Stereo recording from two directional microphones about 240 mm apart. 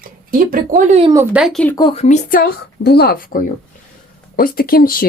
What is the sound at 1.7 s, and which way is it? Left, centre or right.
Speech, centre.